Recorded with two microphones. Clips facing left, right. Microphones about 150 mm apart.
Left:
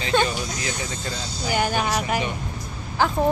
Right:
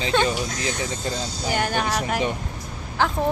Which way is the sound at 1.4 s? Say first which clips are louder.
Left 1 dB; 5° left (ahead or behind).